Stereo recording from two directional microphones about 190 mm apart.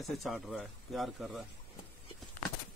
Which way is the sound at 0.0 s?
Centre (ahead or behind).